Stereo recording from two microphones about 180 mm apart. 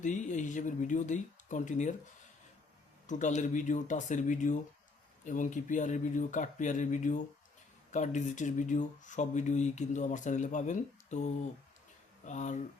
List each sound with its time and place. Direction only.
0.0 s speech: 40° left (ahead or behind)
3.1 s speech: 45° left (ahead or behind)